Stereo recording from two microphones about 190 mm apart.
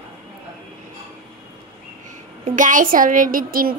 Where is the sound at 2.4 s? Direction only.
45° right (ahead or behind).